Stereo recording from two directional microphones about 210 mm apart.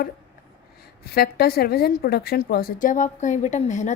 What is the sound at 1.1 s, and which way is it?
Speech, 50° left (ahead or behind).